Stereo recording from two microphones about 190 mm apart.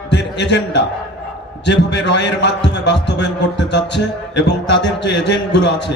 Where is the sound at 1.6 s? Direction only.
65° left (ahead or behind).